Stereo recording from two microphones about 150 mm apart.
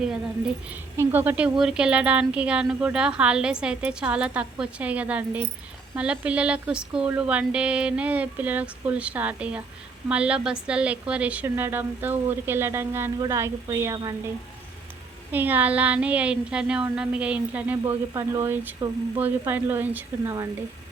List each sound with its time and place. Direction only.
0.0 s a woman's voice: 5° right (ahead or behind); by 14.2 s 25° right (ahead or behind)
15.3 s a woman's voice: 10° right (ahead or behind)